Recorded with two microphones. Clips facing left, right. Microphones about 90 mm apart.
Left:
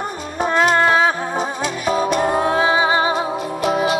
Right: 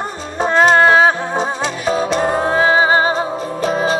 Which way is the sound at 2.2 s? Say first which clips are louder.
Right 2 dB; 45° right (ahead or behind).